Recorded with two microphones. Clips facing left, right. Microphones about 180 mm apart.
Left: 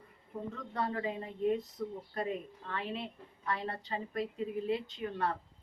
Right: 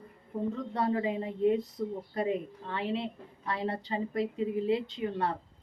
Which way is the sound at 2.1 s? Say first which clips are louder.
Right 6 dB; 25° right (ahead or behind).